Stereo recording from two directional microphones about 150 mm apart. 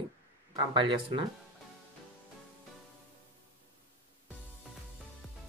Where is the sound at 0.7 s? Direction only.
35° right (ahead or behind).